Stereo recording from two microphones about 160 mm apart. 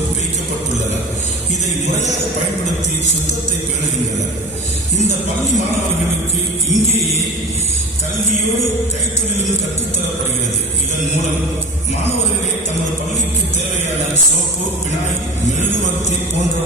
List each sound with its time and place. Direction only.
6.7 s music: 45° left (ahead or behind)